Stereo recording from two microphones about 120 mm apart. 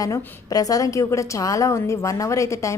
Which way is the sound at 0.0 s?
30° left (ahead or behind).